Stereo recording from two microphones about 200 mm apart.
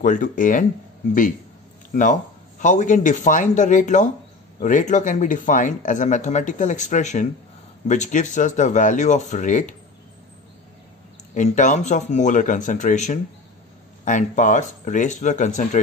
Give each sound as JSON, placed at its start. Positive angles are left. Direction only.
{"t": 0.0, "sound": "speech", "side_deg": 40}
{"t": 2.6, "sound": "speech", "side_deg": 35}
{"t": 11.3, "sound": "speech", "side_deg": 40}